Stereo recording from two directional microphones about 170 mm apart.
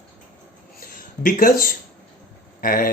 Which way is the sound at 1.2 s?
55° left (ahead or behind).